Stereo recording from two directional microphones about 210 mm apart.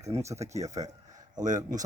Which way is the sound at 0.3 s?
30° right (ahead or behind).